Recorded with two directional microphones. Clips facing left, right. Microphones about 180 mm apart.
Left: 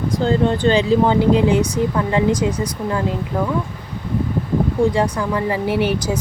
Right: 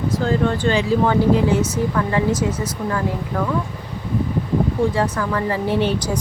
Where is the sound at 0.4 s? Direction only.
20° left (ahead or behind).